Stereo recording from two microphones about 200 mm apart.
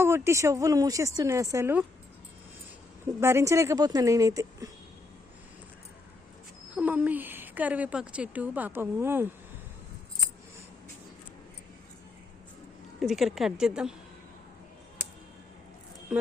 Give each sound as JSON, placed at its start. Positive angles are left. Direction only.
{"t": 0.0, "sound": "speech", "side_deg": -15}
{"t": 3.2, "sound": "speech", "side_deg": -10}
{"t": 6.7, "sound": "speech", "side_deg": -10}
{"t": 13.0, "sound": "a woman's voice", "side_deg": 0}